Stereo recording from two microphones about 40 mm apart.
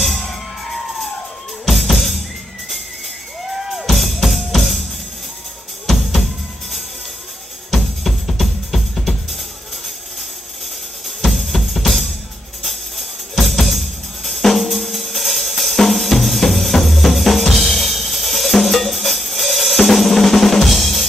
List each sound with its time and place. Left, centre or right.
0.0 s music: centre
1.7 s drum: centre
3.7 s drum kit: centre
7.7 s music: centre
11.1 s drum kit: centre
12.6 s music: centre